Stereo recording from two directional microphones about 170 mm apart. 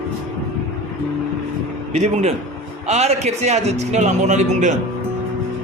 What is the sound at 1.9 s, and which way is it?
Speech, 40° right (ahead or behind).